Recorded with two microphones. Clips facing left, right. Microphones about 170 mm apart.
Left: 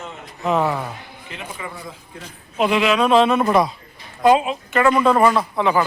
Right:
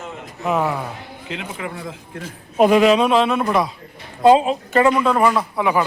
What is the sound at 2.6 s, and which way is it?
Speech, 45° right (ahead or behind).